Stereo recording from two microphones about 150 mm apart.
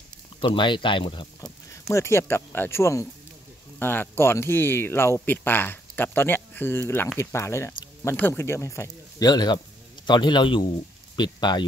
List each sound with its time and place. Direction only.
0.4 s speech: 35° left (ahead or behind)
1.7 s a man's voice: 20° left (ahead or behind)